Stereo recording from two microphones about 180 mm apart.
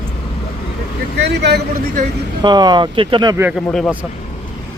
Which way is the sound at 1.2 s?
70° right (ahead or behind).